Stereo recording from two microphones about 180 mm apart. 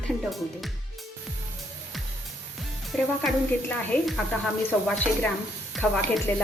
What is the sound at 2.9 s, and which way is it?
Speech, 5° left (ahead or behind).